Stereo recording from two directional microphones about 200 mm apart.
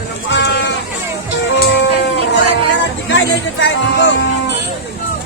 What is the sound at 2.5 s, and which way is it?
Music, 65° left (ahead or behind).